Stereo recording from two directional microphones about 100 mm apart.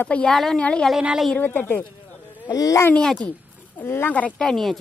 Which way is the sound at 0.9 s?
5° right (ahead or behind).